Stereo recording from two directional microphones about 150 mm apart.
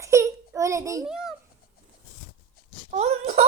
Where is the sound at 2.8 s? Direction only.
50° right (ahead or behind).